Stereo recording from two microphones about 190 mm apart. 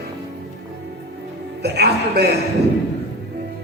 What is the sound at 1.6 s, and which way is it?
Speech, 60° right (ahead or behind).